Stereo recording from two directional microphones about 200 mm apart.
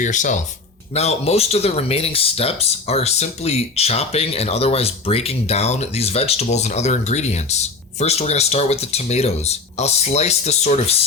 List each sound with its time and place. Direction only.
0.0 s speech: 40° left (ahead or behind)